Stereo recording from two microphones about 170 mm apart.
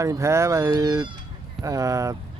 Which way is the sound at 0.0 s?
15° right (ahead or behind).